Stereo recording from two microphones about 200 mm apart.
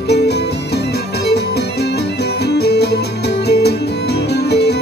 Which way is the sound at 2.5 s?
55° left (ahead or behind).